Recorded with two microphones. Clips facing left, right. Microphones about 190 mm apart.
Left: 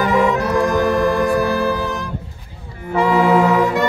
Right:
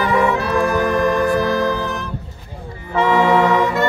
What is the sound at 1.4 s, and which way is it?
Music, 10° left (ahead or behind).